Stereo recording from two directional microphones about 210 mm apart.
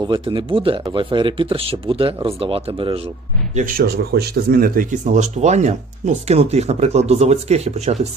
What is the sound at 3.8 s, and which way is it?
Speech, 50° right (ahead or behind).